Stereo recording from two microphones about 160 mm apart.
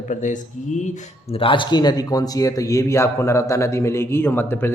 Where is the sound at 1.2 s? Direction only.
35° left (ahead or behind).